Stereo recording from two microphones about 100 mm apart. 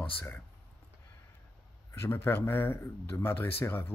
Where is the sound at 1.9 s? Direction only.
25° left (ahead or behind).